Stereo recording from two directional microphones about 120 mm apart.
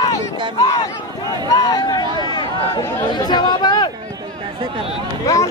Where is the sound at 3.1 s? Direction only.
40° left (ahead or behind).